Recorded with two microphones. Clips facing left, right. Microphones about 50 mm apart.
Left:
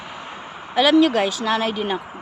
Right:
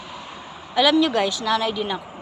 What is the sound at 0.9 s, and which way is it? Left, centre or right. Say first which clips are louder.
Speech: left 3 dB; left.